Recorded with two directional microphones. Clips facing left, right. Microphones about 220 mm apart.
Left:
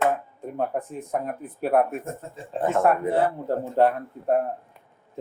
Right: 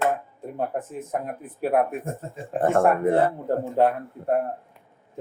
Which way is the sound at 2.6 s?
50° right (ahead or behind).